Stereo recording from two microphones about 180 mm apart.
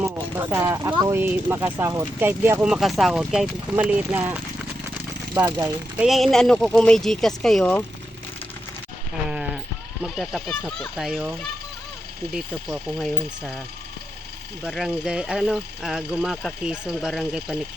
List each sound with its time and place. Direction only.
0.0 s speech: 15° right (ahead or behind)
5.4 s speech: 20° right (ahead or behind)
6.0 s speech: centre (ahead or behind)
10.0 s speech: centre (ahead or behind)
14.6 s speech: 5° right (ahead or behind)